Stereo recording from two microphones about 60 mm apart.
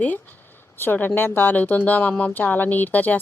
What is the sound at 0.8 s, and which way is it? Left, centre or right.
A woman's voice, left.